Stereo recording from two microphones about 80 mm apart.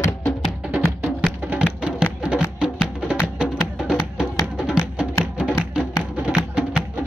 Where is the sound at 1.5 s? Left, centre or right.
Centre.